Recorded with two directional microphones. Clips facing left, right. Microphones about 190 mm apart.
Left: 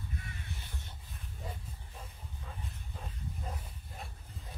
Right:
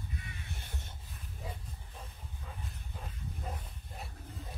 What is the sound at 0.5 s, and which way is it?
Crow, 55° right (ahead or behind).